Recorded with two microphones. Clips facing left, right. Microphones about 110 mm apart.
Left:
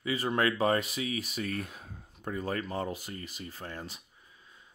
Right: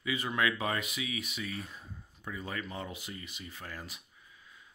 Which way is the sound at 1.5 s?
65° left (ahead or behind).